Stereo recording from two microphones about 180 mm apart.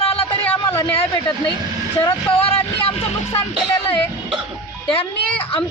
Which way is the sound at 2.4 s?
30° left (ahead or behind).